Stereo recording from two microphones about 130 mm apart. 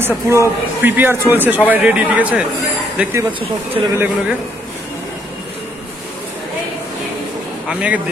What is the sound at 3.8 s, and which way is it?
Speech, 40° right (ahead or behind).